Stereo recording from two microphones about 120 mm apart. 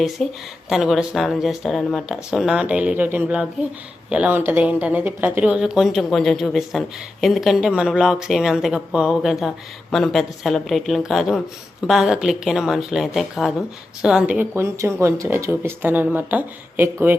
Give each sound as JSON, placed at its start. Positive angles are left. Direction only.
{"t": 0.2, "sound": "speech", "side_deg": 5}